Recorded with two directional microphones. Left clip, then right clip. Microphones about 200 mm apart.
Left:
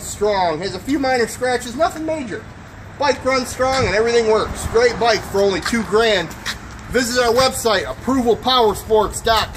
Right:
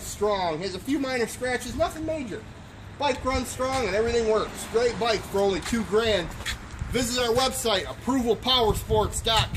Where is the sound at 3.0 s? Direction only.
45° right (ahead or behind).